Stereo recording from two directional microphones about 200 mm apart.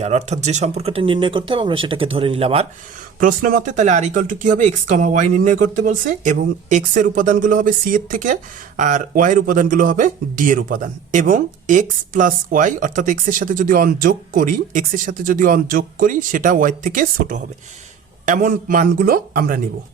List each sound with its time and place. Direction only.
0.0 s speech: 35° right (ahead or behind)
3.2 s speech: 45° right (ahead or behind)